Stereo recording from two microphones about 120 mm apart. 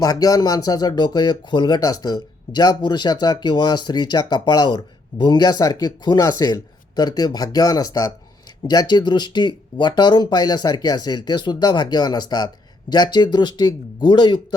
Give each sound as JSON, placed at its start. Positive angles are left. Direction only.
{"t": 0.0, "sound": "speech", "side_deg": 30}